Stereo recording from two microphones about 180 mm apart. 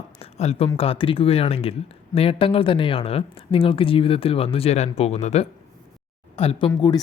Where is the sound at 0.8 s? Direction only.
30° left (ahead or behind).